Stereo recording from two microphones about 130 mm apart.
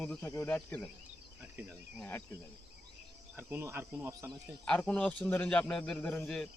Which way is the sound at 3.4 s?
15° right (ahead or behind).